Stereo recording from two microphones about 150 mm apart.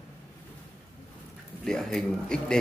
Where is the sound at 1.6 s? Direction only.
5° left (ahead or behind).